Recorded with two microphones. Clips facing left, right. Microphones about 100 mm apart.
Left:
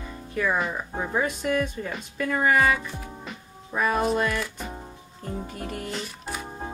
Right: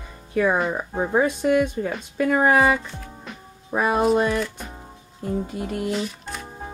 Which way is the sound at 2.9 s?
5° left (ahead or behind).